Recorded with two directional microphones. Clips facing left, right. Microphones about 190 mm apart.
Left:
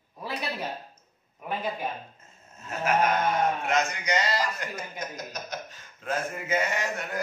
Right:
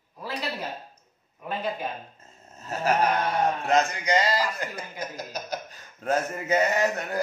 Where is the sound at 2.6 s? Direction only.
35° right (ahead or behind).